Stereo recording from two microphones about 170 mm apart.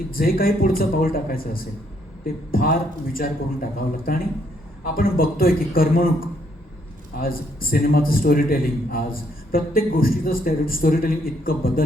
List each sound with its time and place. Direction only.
0.1 s a man's voice: 60° left (ahead or behind)